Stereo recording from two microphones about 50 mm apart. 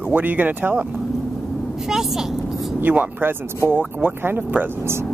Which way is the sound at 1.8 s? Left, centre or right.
Centre.